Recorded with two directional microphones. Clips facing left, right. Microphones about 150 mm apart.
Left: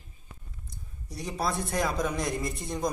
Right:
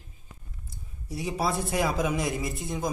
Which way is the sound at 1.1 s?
5° right (ahead or behind).